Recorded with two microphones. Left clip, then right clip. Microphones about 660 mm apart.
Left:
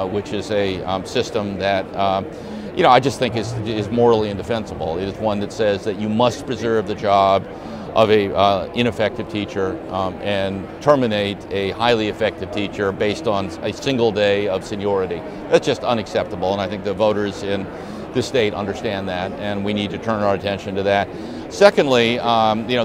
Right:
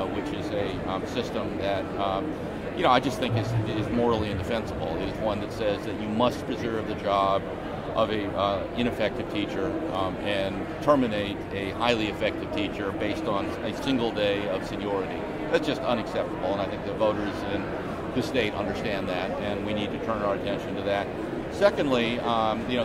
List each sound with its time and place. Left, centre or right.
0.5 s speech: left